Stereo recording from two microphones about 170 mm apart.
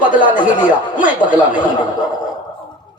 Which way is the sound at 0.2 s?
25° left (ahead or behind).